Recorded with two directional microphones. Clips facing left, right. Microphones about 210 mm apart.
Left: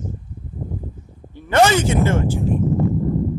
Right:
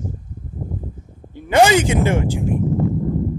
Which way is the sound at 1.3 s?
15° right (ahead or behind).